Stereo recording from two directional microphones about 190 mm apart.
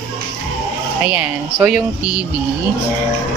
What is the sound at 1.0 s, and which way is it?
Speech, 10° right (ahead or behind).